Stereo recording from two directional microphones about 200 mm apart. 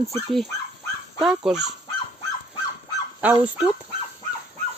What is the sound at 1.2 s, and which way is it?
Speech, centre (ahead or behind).